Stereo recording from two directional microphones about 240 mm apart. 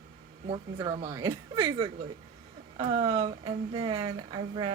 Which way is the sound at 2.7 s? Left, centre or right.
Right.